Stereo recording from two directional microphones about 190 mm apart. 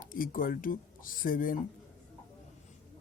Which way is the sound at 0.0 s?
45° left (ahead or behind).